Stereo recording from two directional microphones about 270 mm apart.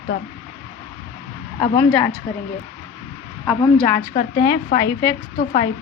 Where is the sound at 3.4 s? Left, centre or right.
Centre.